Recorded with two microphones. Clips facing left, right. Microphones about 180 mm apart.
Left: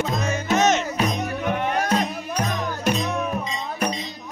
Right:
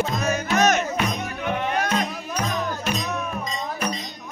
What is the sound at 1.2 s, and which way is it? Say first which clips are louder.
Music: left 2 dB; 40° left (ahead or behind).